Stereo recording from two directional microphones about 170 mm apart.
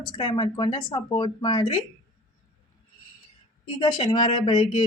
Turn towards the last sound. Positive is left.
turn(degrees=30)  # may be behind; listen again after turning